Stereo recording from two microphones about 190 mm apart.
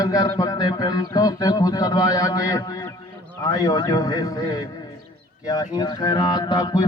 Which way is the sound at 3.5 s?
20° left (ahead or behind).